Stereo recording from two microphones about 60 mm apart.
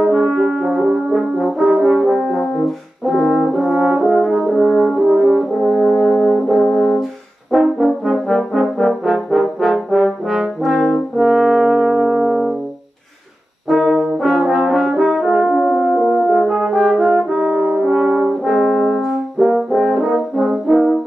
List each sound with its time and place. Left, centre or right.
0.0 s french horn: centre
0.3 s brass instrument: centre
3.1 s french horn: centre
7.5 s brass instrument: centre
13.7 s brass instrument: centre
20.1 s brass instrument: centre